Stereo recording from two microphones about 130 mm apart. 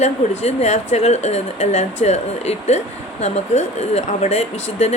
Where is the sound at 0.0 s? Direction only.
60° left (ahead or behind).